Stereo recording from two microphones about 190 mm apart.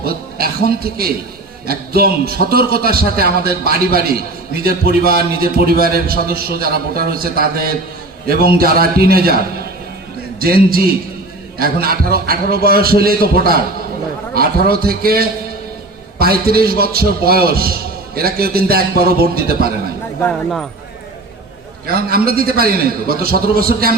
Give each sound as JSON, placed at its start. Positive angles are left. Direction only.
{"t": 0.0, "sound": "a man's voice", "side_deg": -55}
{"t": 10.4, "sound": "a man's voice", "side_deg": -50}
{"t": 20.2, "sound": "speech", "side_deg": 0}
{"t": 21.8, "sound": "a man's voice", "side_deg": -50}